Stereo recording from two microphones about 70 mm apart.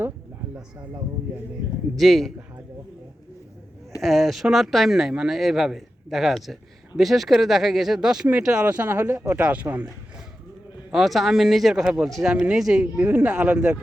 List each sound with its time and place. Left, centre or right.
2.0 s speech: centre
4.0 s speech: centre
8.6 s speech: right
9.4 s speech: centre
10.9 s speech: centre
12.0 s speech: centre
12.3 s speech: centre
12.8 s speech: right